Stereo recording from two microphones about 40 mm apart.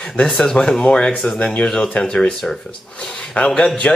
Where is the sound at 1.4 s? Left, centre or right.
Left.